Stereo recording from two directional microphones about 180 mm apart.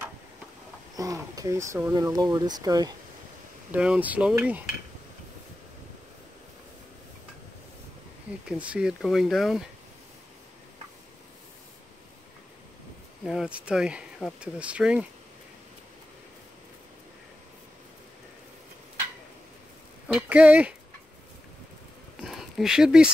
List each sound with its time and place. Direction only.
0.9 s speech: 20° right (ahead or behind)
3.7 s a sound: 5° right (ahead or behind)
8.5 s speech: 5° right (ahead or behind)
13.2 s speech: centre (ahead or behind)
20.1 s speech: 5° right (ahead or behind)
22.2 s a sound: centre (ahead or behind)